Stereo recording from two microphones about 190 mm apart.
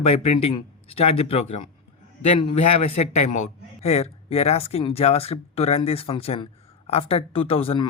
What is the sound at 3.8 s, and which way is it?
Speech, 35° left (ahead or behind).